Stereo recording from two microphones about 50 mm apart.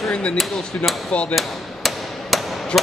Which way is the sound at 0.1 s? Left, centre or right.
Centre.